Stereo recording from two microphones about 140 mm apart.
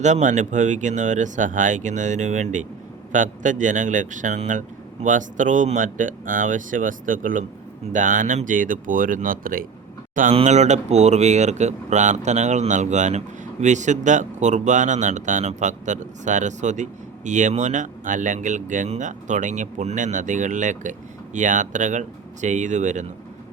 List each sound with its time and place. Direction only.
0.0 s speech: 60° right (ahead or behind); by 9.6 s 85° right
10.3 s speech: 55° right (ahead or behind)